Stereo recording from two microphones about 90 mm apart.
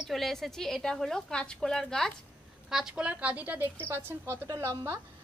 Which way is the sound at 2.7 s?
5° right (ahead or behind).